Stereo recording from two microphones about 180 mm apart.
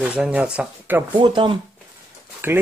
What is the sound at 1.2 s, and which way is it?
Speech, 25° right (ahead or behind).